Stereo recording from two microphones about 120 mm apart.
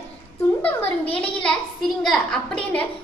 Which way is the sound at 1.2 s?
10° left (ahead or behind).